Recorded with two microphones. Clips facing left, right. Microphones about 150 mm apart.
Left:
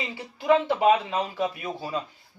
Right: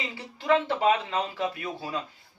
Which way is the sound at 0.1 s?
15° left (ahead or behind).